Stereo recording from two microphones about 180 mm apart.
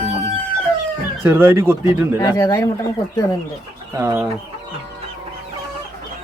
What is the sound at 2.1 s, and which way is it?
Speech, 20° left (ahead or behind).